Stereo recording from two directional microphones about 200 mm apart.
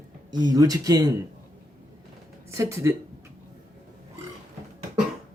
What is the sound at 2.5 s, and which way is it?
Speech, 15° right (ahead or behind).